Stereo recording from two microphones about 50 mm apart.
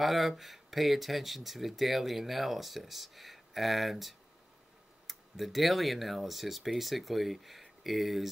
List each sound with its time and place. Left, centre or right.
0.0 s speech: centre